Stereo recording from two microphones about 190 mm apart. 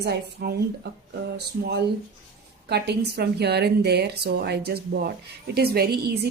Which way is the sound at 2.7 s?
60° right (ahead or behind).